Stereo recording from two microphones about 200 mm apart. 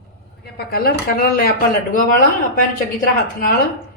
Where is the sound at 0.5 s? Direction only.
50° left (ahead or behind).